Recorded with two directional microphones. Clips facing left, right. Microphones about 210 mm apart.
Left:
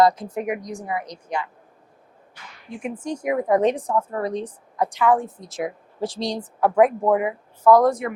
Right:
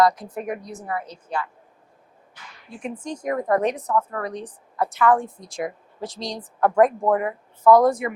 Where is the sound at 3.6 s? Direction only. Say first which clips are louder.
Left 2 dB; 25° left (ahead or behind).